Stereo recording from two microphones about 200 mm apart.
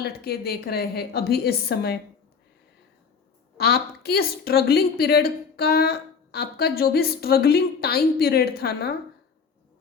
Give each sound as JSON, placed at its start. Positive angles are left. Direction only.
{"t": 0.0, "sound": "a woman's voice", "side_deg": 50}
{"t": 3.6, "sound": "a woman's voice", "side_deg": 50}